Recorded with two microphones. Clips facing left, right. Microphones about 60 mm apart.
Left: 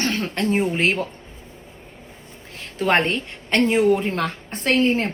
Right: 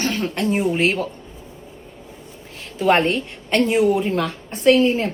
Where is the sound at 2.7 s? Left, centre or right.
Left.